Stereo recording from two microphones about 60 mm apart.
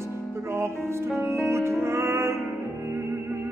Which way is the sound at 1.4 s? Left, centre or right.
Right.